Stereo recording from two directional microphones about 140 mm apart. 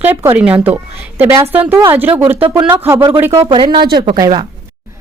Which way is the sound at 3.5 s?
35° right (ahead or behind).